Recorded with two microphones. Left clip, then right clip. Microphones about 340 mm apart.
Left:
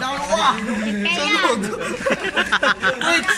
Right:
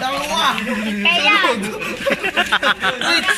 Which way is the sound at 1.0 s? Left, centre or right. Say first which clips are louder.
Right 6 dB; right.